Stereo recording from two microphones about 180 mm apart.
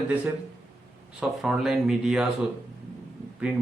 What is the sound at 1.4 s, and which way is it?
Speech, centre (ahead or behind).